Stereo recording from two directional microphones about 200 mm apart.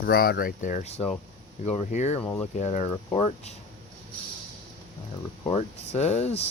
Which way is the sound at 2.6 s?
35° left (ahead or behind).